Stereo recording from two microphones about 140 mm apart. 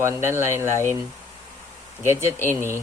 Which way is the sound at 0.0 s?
20° right (ahead or behind).